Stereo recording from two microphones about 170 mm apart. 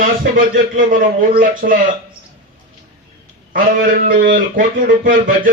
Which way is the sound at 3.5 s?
55° right (ahead or behind).